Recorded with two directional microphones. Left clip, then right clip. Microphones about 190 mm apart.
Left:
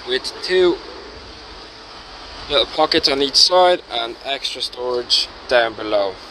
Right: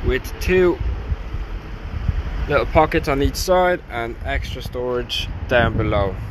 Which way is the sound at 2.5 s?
15° left (ahead or behind).